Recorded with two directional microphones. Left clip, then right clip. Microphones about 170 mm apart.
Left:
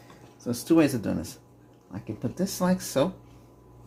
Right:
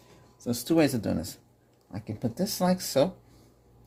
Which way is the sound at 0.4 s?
55° right (ahead or behind).